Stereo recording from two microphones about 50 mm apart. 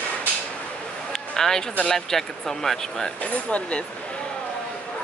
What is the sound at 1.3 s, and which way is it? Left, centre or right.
Speech, centre.